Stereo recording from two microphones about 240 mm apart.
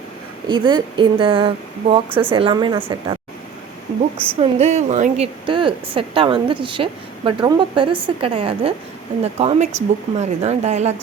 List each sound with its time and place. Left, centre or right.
0.4 s a woman's voice: centre
4.4 s a woman's voice: right